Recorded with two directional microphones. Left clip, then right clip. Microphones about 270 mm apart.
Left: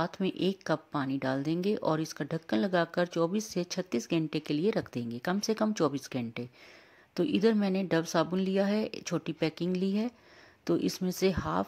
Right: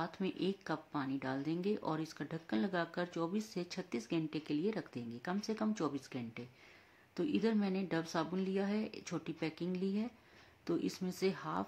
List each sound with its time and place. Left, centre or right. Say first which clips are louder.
0.0 s speech: left 8 dB; left